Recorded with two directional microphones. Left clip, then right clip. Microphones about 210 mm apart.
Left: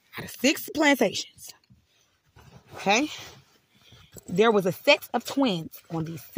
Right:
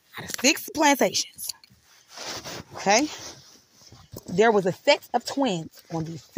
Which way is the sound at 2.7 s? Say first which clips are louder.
Right 2 dB; 5° left (ahead or behind).